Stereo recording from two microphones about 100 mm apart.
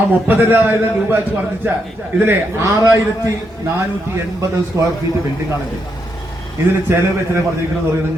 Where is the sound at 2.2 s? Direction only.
20° right (ahead or behind).